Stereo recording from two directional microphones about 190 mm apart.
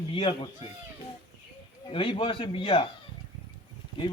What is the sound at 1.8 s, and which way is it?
Speech, 25° left (ahead or behind).